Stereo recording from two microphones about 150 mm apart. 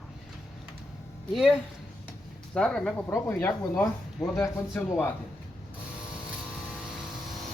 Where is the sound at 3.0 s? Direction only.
15° left (ahead or behind).